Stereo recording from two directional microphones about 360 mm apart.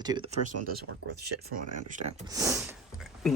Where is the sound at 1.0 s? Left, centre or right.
Right.